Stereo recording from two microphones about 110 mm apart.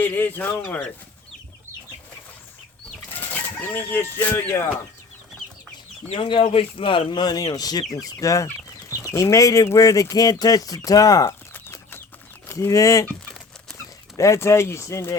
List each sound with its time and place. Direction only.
0.0 s speech: 15° left (ahead or behind)
3.1 s speech: 15° left (ahead or behind)
6.1 s speech: 50° left (ahead or behind); by 11.3 s 35° left (ahead or behind)
11.5 s chicken: 20° left (ahead or behind)
12.5 s speech: 30° left (ahead or behind)
14.2 s speech: 25° left (ahead or behind)